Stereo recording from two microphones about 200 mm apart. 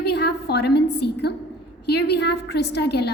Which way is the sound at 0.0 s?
55° left (ahead or behind).